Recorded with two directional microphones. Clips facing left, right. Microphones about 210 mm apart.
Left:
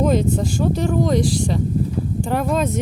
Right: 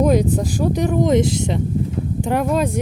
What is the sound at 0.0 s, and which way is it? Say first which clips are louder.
Speech: right 2 dB; 15° right (ahead or behind).